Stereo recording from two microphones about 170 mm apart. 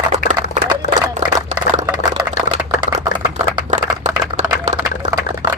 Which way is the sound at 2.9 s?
25° right (ahead or behind).